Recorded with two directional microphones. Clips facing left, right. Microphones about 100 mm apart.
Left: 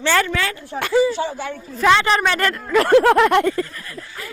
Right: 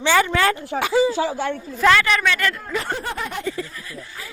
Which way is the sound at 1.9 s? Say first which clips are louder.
Left 3 dB; 30° left (ahead or behind).